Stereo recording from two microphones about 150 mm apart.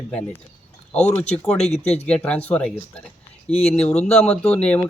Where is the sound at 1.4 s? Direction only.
5° left (ahead or behind).